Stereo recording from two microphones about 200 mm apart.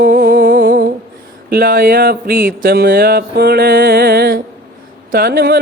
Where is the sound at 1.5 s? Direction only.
50° right (ahead or behind).